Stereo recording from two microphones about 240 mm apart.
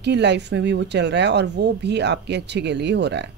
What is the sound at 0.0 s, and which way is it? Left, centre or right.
Speech, right.